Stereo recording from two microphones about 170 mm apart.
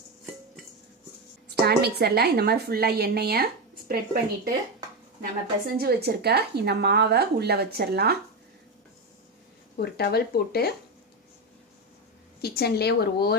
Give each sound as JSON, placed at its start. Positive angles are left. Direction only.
{"t": 1.5, "sound": "a woman's voice", "side_deg": -75}
{"t": 5.8, "sound": "a woman's voice", "side_deg": -65}
{"t": 9.7, "sound": "speech", "side_deg": 65}
{"t": 12.4, "sound": "speech", "side_deg": 70}